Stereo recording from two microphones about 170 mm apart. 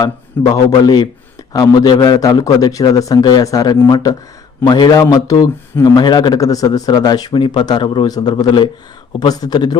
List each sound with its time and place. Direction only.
0.5 s speech: 25° left (ahead or behind)